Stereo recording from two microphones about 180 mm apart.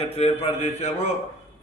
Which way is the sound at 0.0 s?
35° left (ahead or behind).